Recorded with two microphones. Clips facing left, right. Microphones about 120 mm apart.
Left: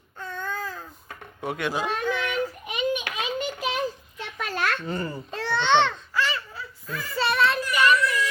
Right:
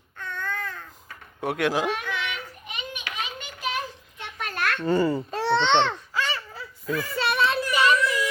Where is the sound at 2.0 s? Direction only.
30° left (ahead or behind).